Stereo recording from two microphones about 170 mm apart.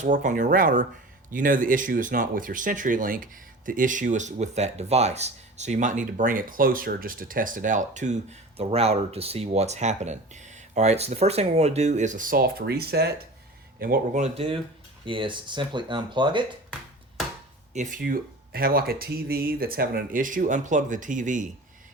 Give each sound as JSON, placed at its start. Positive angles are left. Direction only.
{"t": 0.0, "sound": "speech", "side_deg": -45}
{"t": 13.7, "sound": "speech", "side_deg": -60}
{"t": 14.2, "sound": "speech", "side_deg": -35}
{"t": 17.7, "sound": "speech", "side_deg": -50}